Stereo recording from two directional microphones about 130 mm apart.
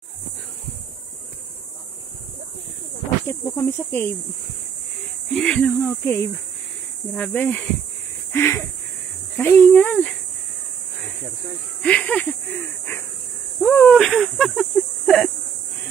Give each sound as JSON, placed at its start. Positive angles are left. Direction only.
{"t": 3.3, "sound": "speech", "side_deg": 20}
{"t": 5.3, "sound": "speech", "side_deg": 10}
{"t": 8.3, "sound": "a sound", "side_deg": 20}
{"t": 9.4, "sound": "speech", "side_deg": 15}
{"t": 11.8, "sound": "speech", "side_deg": 10}
{"t": 13.9, "sound": "speech", "side_deg": 0}